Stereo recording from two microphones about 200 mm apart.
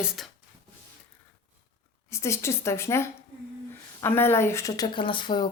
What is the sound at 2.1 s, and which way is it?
A woman's voice, 15° left (ahead or behind).